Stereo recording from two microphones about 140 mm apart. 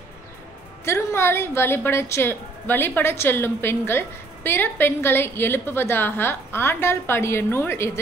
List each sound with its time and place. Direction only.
0.8 s a woman's voice: 20° left (ahead or behind)